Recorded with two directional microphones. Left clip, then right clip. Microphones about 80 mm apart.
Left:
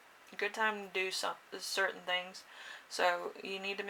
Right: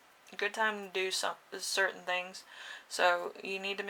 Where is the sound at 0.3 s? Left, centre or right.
Right.